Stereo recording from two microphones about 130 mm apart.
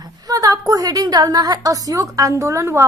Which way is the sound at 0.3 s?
25° right (ahead or behind).